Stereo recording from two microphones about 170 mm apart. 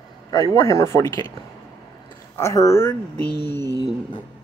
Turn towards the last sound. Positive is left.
turn(degrees=-25)  # may be behind; listen again after turning